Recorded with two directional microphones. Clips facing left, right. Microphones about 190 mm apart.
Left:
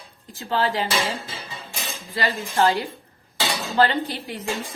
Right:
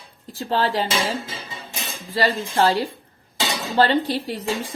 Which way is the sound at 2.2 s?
35° right (ahead or behind).